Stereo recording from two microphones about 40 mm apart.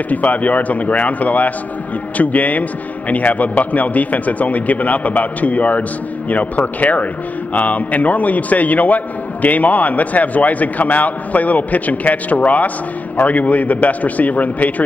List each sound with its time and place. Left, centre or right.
0.1 s a man's voice: left